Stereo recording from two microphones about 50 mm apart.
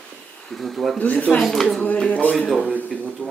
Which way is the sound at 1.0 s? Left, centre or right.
Left.